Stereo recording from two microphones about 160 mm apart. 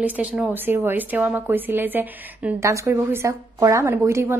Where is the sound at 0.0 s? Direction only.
10° right (ahead or behind).